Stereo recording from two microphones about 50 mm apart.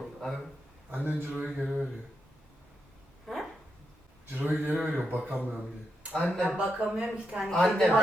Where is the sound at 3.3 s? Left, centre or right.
Centre.